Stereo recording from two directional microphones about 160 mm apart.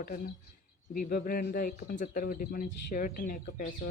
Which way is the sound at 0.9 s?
60° left (ahead or behind).